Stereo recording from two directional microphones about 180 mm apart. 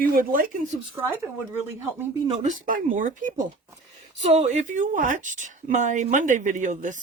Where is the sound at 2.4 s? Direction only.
45° right (ahead or behind).